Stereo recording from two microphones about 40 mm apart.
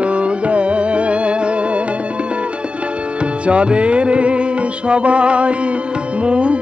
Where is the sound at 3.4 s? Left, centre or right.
Right.